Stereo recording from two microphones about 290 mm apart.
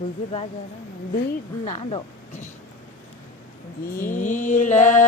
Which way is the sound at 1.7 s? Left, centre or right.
Centre.